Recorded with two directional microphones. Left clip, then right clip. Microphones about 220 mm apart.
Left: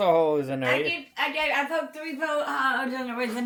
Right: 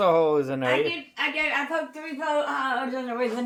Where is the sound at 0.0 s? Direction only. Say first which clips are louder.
Right 1 dB; 5° right (ahead or behind).